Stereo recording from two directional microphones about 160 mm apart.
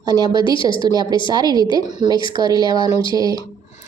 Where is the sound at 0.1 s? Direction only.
30° left (ahead or behind).